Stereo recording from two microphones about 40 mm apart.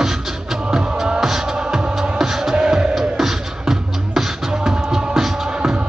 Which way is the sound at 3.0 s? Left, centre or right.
Centre.